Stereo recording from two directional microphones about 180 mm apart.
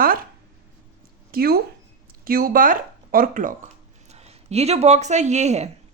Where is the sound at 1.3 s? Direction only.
55° right (ahead or behind).